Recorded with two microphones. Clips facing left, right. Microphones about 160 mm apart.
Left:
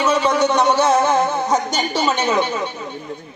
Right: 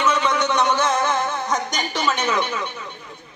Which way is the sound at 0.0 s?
35° left (ahead or behind).